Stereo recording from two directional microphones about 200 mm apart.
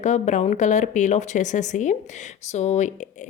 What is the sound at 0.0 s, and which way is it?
Speech, 35° left (ahead or behind).